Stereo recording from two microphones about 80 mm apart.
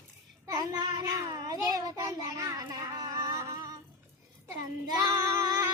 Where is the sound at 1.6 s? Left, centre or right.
Right.